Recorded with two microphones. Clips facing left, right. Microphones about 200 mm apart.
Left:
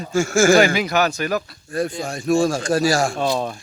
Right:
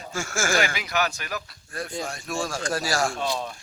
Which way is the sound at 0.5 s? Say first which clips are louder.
Left 9 dB; 35° left (ahead or behind).